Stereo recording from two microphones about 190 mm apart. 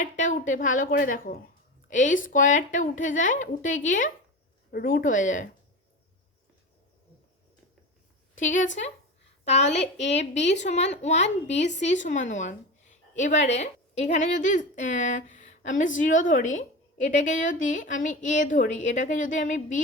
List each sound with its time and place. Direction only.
0.0 s speech: 40° left (ahead or behind)
8.4 s a woman's voice: 40° left (ahead or behind)